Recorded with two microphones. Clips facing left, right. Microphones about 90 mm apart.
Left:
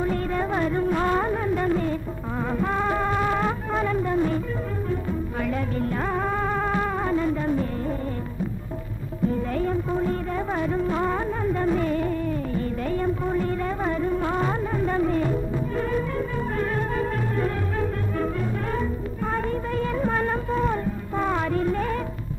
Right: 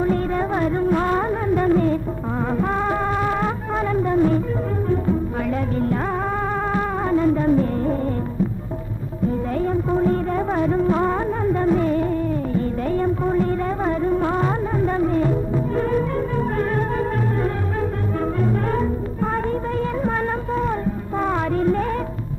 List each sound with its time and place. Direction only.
0.0 s music: 30° right (ahead or behind)
1.5 s music: 40° right (ahead or behind)
2.5 s music: 30° right (ahead or behind)
6.7 s music: 35° right (ahead or behind)
9.8 s music: 40° right (ahead or behind)
12.9 s music: 40° right (ahead or behind)
20.5 s a sound: 35° right (ahead or behind)